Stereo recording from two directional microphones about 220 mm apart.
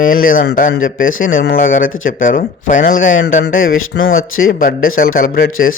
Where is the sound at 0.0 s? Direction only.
40° left (ahead or behind).